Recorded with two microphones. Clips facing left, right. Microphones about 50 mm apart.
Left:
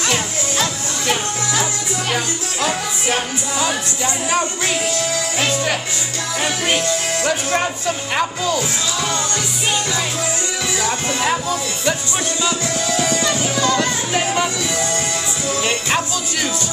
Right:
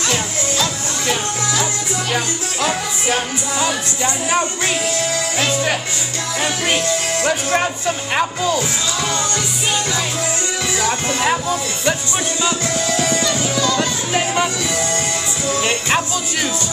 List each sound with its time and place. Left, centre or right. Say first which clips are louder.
0.0 s music: even; left
2.1 s music: right 1 dB; right
7.2 s speech: right 1 dB; centre
10.8 s speech: right 2 dB; right
11.2 s music: right 2 dB; right
13.2 s music: even; left
13.7 s music: even; centre
15.6 s music: right 1 dB; right